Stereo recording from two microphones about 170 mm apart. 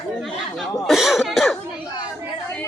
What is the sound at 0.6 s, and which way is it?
Speech, centre (ahead or behind).